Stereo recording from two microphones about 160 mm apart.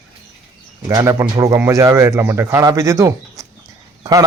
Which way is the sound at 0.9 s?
20° right (ahead or behind).